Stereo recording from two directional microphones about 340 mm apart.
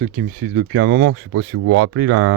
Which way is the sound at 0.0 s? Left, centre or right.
Right.